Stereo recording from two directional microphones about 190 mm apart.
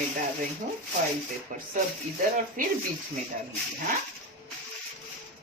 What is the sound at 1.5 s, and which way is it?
A woman's voice, 45° right (ahead or behind).